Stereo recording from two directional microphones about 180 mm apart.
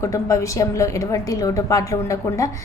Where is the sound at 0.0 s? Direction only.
15° left (ahead or behind).